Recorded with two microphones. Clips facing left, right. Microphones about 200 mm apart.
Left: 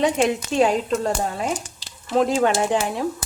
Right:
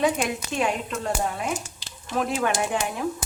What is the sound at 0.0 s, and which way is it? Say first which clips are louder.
Speech: left 4 dB; 30° left (ahead or behind).